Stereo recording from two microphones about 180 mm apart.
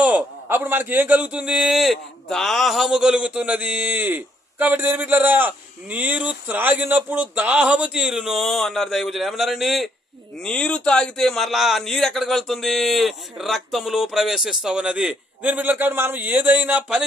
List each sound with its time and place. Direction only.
0.0 s a man's voice: 10° right (ahead or behind)